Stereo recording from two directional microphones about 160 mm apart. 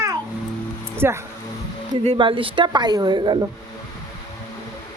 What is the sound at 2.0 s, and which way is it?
A woman's voice, 35° right (ahead or behind).